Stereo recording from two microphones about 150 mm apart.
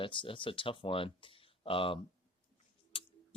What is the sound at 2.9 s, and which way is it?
Scissors, 40° left (ahead or behind).